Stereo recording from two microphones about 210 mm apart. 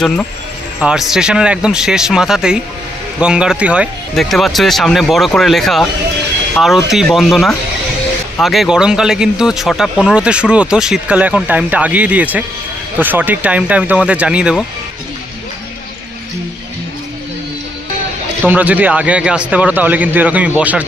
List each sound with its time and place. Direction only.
0.0 s speech: 5° left (ahead or behind)
18.4 s a man's voice: 10° right (ahead or behind)